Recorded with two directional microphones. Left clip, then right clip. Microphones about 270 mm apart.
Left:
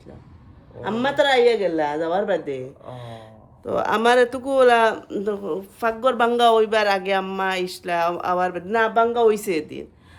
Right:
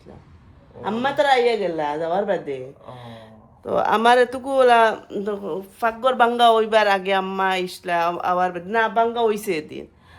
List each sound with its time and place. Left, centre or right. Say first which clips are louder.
0.8 s speech: even; centre
2.9 s a sound: left 2 dB; centre
3.7 s speech: right 2 dB; centre